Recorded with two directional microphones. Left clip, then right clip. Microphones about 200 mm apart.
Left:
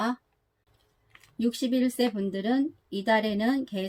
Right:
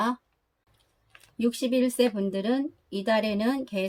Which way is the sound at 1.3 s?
15° right (ahead or behind).